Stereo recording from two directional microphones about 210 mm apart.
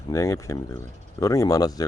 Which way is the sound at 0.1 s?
15° left (ahead or behind).